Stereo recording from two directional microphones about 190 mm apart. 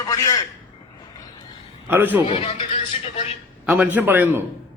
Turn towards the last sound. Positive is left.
turn(degrees=-10)  # may be behind; listen again after turning